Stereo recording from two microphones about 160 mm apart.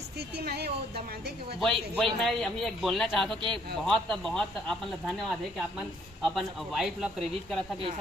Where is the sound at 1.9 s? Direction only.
Centre (ahead or behind).